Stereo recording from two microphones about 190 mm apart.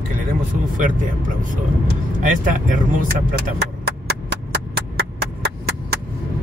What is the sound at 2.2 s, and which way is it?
Speech, 45° right (ahead or behind).